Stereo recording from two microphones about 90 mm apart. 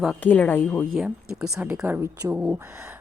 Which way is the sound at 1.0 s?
10° right (ahead or behind).